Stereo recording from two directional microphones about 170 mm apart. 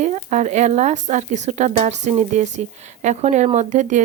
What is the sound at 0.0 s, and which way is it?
Speech, 45° right (ahead or behind).